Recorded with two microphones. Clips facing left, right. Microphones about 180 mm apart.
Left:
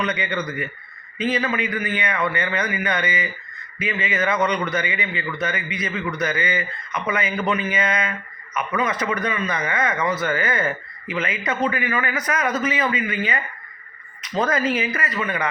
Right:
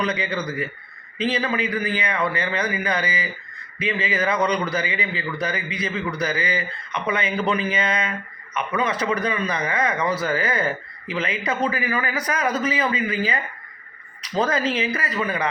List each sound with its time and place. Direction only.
0.0 s a man's voice: 30° right (ahead or behind)
14.4 s speech: 30° right (ahead or behind)